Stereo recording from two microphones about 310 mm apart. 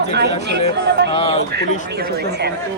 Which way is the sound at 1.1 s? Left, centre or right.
Centre.